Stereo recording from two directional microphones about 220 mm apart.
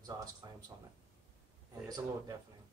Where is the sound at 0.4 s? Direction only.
15° right (ahead or behind).